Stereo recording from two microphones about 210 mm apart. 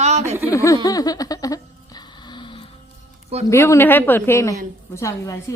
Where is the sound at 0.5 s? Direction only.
15° left (ahead or behind).